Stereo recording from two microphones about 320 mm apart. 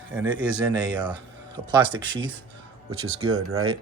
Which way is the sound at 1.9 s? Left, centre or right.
Right.